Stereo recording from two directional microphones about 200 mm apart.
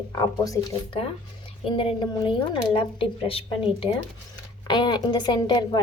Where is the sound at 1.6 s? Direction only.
25° left (ahead or behind).